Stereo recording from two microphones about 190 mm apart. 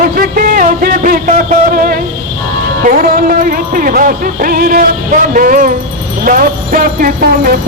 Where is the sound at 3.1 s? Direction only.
45° right (ahead or behind).